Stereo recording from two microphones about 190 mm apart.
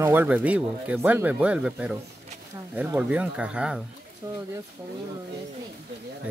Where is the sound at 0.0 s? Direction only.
10° right (ahead or behind).